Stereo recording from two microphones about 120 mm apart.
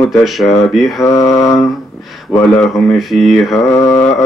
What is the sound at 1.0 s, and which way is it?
Mantra, 25° left (ahead or behind).